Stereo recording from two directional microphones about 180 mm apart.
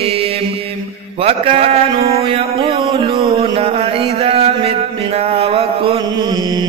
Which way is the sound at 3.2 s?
35° right (ahead or behind).